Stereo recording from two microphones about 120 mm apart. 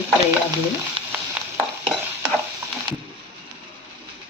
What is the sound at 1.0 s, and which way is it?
Frying, 50° right (ahead or behind).